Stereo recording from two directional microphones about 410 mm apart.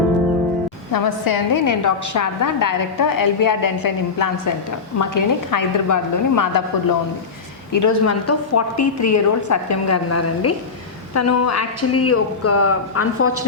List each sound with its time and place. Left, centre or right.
0.9 s a woman's voice: left
7.7 s a woman's voice: left